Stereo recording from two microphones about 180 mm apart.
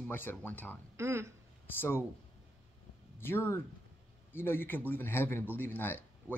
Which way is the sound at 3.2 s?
15° left (ahead or behind).